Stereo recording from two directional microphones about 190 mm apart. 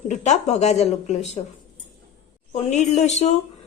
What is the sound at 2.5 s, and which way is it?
Speech, 35° left (ahead or behind).